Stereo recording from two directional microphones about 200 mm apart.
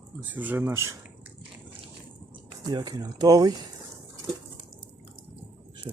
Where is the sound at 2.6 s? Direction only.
20° right (ahead or behind).